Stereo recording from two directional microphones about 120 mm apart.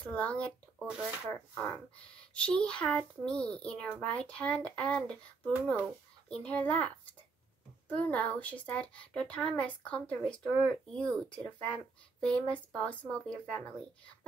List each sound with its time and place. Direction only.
0.0 s a woman's voice: 10° left (ahead or behind)
0.7 s speech: 5° right (ahead or behind)
1.5 s a woman's voice: 20° left (ahead or behind)